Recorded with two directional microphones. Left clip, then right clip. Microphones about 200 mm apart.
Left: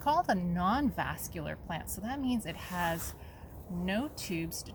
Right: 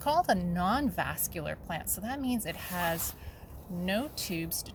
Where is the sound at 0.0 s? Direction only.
20° right (ahead or behind).